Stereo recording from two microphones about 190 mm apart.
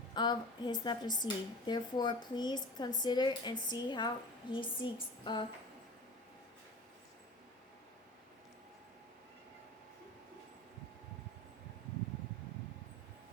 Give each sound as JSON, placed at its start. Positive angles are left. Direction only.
{"t": 0.1, "sound": "a woman's voice", "side_deg": 25}